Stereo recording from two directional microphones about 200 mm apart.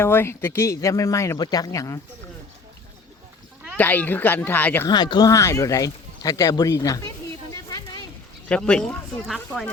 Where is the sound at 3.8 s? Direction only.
10° left (ahead or behind).